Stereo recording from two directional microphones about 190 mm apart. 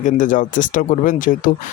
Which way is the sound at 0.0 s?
45° left (ahead or behind).